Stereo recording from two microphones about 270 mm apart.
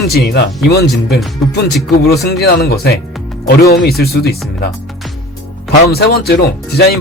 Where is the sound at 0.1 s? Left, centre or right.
Left.